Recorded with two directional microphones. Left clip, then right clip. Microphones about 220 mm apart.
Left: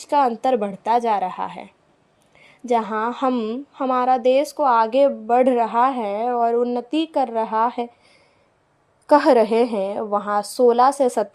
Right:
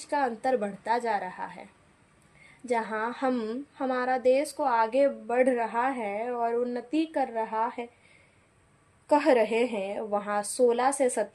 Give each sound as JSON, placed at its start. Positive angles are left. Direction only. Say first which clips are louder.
{"t": 0.0, "sound": "a woman's voice", "louder": "left 10 dB", "side_deg": 30}
{"t": 2.6, "sound": "a woman's voice", "louder": "left 8 dB", "side_deg": 30}
{"t": 9.0, "sound": "a woman's voice", "louder": "left 8 dB", "side_deg": 30}